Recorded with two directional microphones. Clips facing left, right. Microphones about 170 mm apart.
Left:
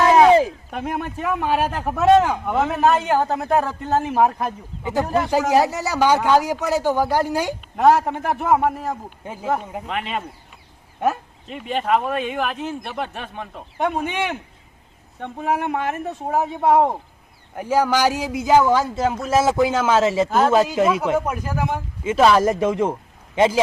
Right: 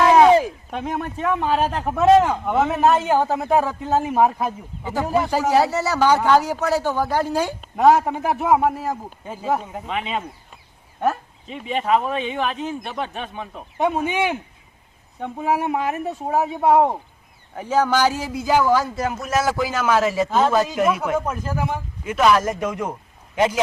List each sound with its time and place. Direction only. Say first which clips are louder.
0.0 s a man's voice: even; centre (ahead or behind)
4.8 s a man's voice: left 1 dB; 15° left (ahead or behind)
7.8 s speech: right 1 dB; centre (ahead or behind)
9.2 s a man's voice: even; 10° left (ahead or behind)
17.6 s a man's voice: even; 10° left (ahead or behind)
20.2 s a man's voice: left 2 dB; centre (ahead or behind)
22.0 s a man's voice: left 2 dB; 30° left (ahead or behind)